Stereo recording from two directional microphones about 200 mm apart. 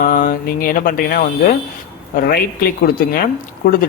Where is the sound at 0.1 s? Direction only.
45° left (ahead or behind).